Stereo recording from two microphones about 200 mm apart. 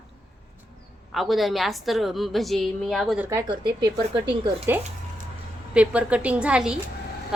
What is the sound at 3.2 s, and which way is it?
Speech, 20° right (ahead or behind).